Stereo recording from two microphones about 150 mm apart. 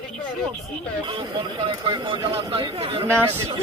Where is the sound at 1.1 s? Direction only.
30° right (ahead or behind).